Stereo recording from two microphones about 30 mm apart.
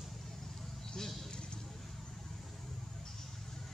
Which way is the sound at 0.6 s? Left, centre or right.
Centre.